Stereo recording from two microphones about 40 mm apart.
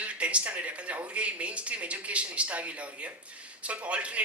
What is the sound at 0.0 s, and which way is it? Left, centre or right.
Speech, right.